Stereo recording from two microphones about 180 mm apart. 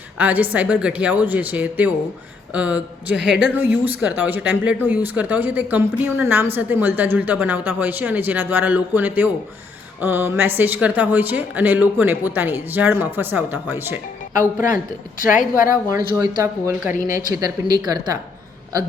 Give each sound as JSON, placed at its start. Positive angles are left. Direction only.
{"t": 0.2, "sound": "a woman's voice", "side_deg": -10}
{"t": 15.2, "sound": "a woman's voice", "side_deg": 50}
{"t": 16.1, "sound": "speech", "side_deg": -15}